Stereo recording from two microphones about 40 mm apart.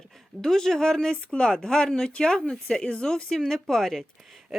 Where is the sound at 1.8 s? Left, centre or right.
Centre.